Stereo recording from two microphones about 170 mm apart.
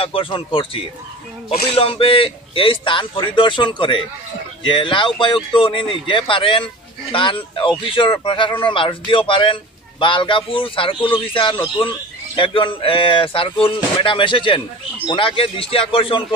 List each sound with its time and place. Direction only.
0.0 s speech: 30° left (ahead or behind)